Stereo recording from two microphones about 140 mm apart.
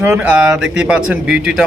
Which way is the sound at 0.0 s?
10° right (ahead or behind).